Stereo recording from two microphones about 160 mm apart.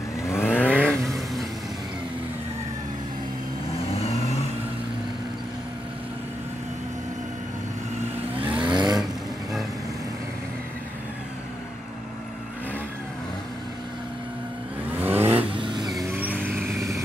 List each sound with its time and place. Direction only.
0.2 s vehicle: 15° left (ahead or behind)
8.4 s vehicle: 10° right (ahead or behind)
8.6 s vehicle: 25° right (ahead or behind)
15.0 s vehicle: 15° right (ahead or behind)
15.2 s vehicle: 35° right (ahead or behind)
16.1 s vehicle: 10° right (ahead or behind)